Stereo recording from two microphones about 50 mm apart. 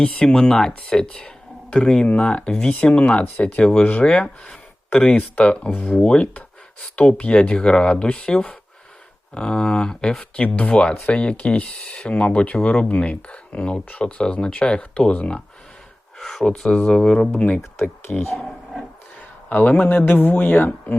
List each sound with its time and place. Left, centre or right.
0.0 s speech: left
10.4 s speech: left
16.1 s speech: centre
17.3 s speech: left
19.5 s a man's voice: left
20.4 s speech: left